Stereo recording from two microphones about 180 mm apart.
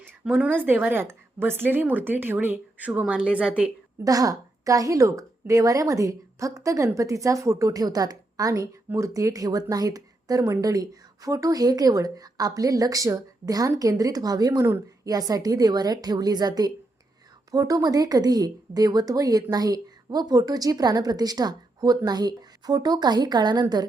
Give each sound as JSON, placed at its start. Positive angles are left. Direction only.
{"t": 0.0, "sound": "a woman's voice", "side_deg": -10}
{"t": 4.0, "sound": "a woman's voice", "side_deg": -20}